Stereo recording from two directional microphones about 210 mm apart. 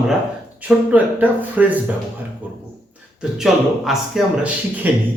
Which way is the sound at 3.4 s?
Centre (ahead or behind).